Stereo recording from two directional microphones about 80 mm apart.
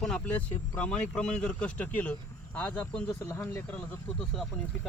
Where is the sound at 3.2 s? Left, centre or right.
Left.